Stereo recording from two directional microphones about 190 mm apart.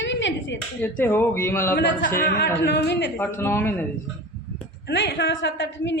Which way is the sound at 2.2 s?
60° left (ahead or behind).